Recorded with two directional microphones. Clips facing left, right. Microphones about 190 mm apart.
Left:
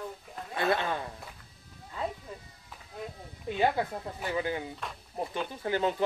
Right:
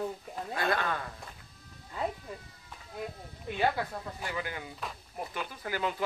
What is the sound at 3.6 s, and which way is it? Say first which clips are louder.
Speech: left 2 dB; 20° left (ahead or behind).